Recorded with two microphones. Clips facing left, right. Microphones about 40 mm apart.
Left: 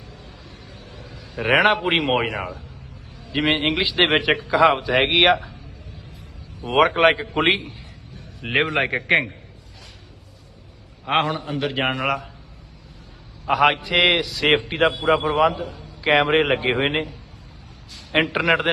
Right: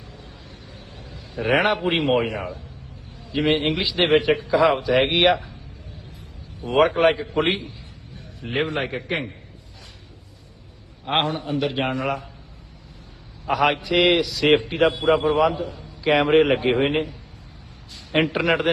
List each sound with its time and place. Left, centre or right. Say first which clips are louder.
0.9 s a man's voice: even; left
6.6 s a man's voice: left 1 dB; left
8.4 s a man's voice: left 4 dB; left
11.3 s a man's voice: even; left
13.5 s a man's voice: left 2 dB; left
18.2 s a man's voice: left 1 dB; left